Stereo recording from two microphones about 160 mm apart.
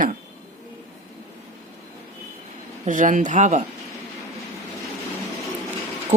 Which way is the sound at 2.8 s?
55° right (ahead or behind).